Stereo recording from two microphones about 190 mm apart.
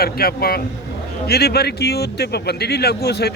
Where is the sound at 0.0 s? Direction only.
55° left (ahead or behind).